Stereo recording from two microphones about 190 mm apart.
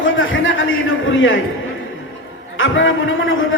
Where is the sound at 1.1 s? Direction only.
85° left.